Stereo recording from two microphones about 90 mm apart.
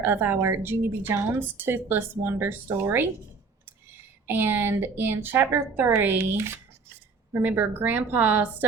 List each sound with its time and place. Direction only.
0.0 s speech: 25° right (ahead or behind)
4.3 s speech: 25° right (ahead or behind)